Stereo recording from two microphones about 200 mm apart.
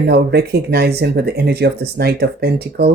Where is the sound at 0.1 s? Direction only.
55° right (ahead or behind).